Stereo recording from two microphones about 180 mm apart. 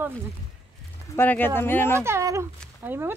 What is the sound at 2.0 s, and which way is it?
Speech, 15° right (ahead or behind).